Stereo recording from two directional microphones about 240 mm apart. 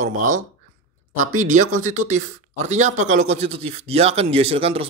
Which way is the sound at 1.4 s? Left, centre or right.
Right.